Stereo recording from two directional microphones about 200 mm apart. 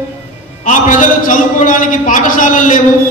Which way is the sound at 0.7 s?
40° left (ahead or behind).